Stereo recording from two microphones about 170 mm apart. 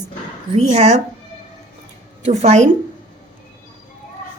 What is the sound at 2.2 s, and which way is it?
Speech, 40° right (ahead or behind).